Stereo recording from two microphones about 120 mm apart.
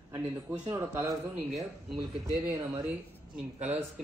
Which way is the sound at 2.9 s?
15° right (ahead or behind).